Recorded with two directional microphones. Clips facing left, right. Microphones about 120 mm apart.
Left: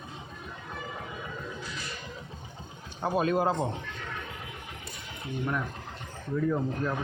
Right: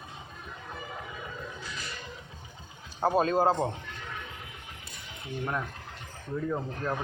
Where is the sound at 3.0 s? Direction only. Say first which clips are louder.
Right 2 dB; 35° right (ahead or behind).